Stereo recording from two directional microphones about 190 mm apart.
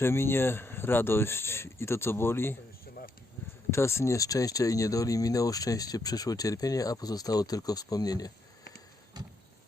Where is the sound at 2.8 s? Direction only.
50° left (ahead or behind).